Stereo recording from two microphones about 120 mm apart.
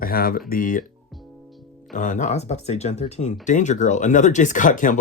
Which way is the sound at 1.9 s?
90° left.